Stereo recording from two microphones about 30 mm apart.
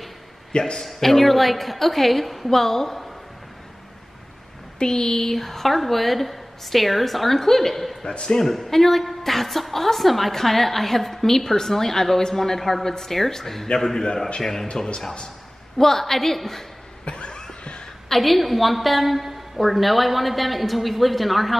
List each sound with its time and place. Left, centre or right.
0.5 s a man's voice: left
0.9 s a woman's voice: centre
2.5 s a woman's voice: centre
4.7 s a woman's voice: left
8.0 s speech: left
8.5 s a woman's voice: centre
15.8 s a woman's voice: centre
17.0 s a sound: left
18.1 s a woman's voice: centre